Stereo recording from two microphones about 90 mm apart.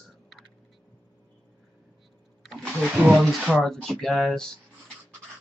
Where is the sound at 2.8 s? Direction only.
15° right (ahead or behind).